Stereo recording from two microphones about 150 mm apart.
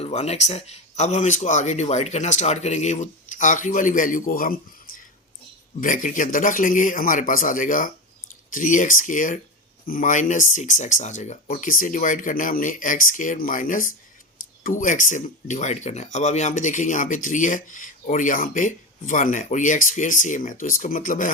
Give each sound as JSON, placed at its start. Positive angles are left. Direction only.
{"t": 0.0, "sound": "speech", "side_deg": 45}
{"t": 5.8, "sound": "speech", "side_deg": 60}